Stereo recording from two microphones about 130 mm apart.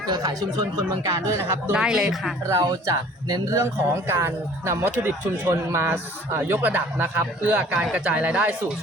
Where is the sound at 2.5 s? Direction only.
25° right (ahead or behind).